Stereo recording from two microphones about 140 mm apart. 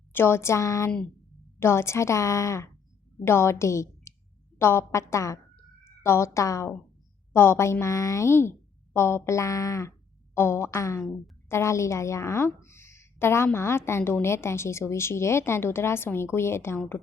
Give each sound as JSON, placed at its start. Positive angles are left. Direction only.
{"t": 0.1, "sound": "a woman's voice", "side_deg": 15}
{"t": 5.5, "sound": "a sound", "side_deg": 20}
{"t": 7.3, "sound": "a woman's voice", "side_deg": 15}